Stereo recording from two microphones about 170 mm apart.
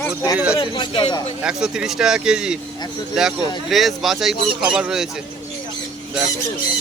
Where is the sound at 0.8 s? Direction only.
30° left (ahead or behind).